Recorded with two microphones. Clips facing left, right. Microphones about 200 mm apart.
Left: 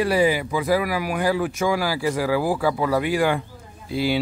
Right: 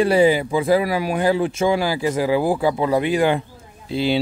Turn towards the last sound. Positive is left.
turn(degrees=-25)  # may be behind; listen again after turning